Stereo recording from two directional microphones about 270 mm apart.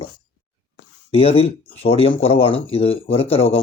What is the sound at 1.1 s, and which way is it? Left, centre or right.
Speech, left.